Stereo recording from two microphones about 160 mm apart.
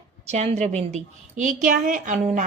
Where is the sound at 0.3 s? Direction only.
45° right (ahead or behind).